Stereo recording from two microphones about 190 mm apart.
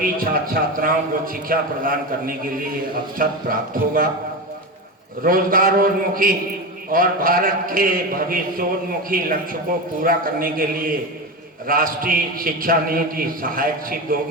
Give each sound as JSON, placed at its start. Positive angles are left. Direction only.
{"t": 0.5, "sound": "a man's voice", "side_deg": -50}
{"t": 5.2, "sound": "a man's voice", "side_deg": -50}